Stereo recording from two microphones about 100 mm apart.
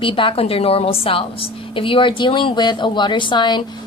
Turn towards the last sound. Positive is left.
turn(degrees=50)  # may be behind; listen again after turning